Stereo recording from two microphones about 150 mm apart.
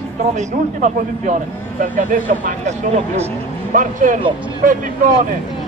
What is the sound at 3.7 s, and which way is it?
Speech, 60° right (ahead or behind).